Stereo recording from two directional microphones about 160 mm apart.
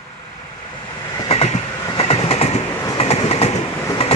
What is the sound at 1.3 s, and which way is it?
Train, 40° left (ahead or behind).